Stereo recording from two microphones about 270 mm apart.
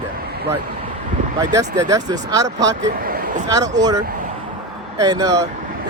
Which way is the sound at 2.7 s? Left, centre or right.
Right.